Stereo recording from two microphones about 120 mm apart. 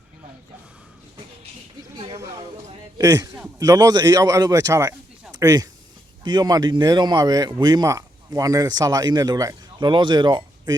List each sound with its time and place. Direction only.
3.0 s speech: 30° right (ahead or behind)